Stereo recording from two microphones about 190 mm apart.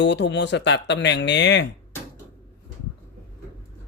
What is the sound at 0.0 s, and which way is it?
Speech, 65° left (ahead or behind).